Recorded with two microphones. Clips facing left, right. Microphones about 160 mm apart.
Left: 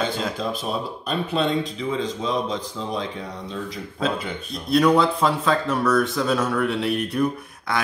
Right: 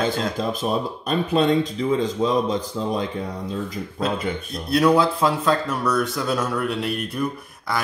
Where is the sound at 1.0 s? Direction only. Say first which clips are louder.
Right 4 dB; 45° right (ahead or behind).